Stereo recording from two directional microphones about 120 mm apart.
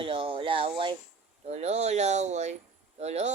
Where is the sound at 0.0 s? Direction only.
45° right (ahead or behind).